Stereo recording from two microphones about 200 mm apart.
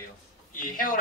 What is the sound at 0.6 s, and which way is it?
Speech, 45° left (ahead or behind).